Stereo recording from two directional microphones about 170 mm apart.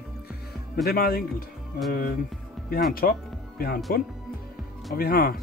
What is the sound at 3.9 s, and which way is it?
Speech, 60° left (ahead or behind).